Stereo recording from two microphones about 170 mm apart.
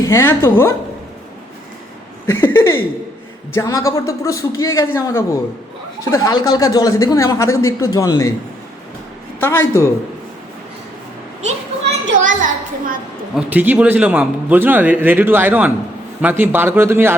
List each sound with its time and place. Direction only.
0.0 s a man's voice: 15° left (ahead or behind)
2.2 s a man's voice: 10° left (ahead or behind)
9.4 s a man's voice: 15° left (ahead or behind)
12.1 s a child's voice: 50° right (ahead or behind)
13.3 s a man's voice: 10° right (ahead or behind)